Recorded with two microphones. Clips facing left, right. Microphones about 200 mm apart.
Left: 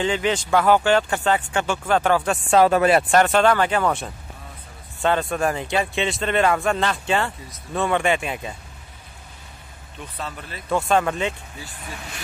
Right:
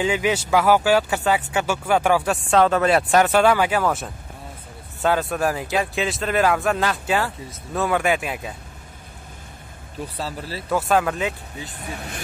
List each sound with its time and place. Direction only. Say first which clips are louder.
0.0 s speech: right 1 dB; 10° right (ahead or behind)
2.5 s speech: left 1 dB; 10° left (ahead or behind)
9.9 s speech: right 4 dB; 30° right (ahead or behind)
10.7 s speech: even; 5° right (ahead or behind)